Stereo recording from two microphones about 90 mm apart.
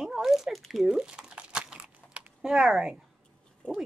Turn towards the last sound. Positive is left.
turn(degrees=10)  # may be behind; listen again after turning